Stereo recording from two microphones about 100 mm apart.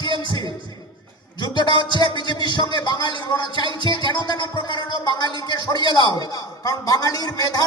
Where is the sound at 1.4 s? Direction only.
45° left (ahead or behind).